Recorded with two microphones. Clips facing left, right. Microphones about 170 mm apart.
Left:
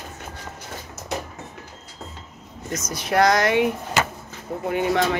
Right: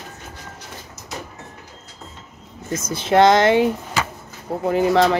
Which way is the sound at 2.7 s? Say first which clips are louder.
Right 5 dB; 25° right (ahead or behind).